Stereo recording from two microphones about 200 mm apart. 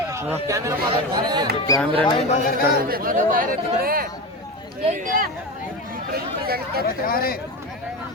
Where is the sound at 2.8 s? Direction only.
45° right (ahead or behind).